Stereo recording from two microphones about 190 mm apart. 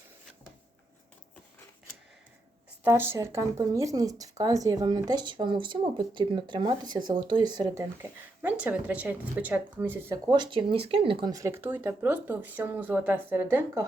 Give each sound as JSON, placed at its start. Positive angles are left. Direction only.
{"t": 2.8, "sound": "speech", "side_deg": -10}